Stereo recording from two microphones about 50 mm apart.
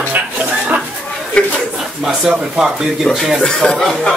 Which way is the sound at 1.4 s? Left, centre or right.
Left.